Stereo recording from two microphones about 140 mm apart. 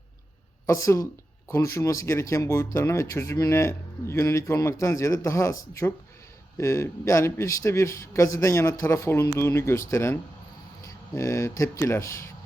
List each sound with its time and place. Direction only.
0.7 s speech: 25° left (ahead or behind)